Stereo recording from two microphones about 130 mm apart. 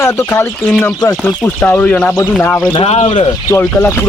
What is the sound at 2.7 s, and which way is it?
Speech, 55° left (ahead or behind).